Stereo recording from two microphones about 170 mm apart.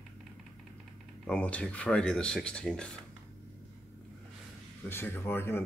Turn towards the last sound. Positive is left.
turn(degrees=15)  # may be behind; listen again after turning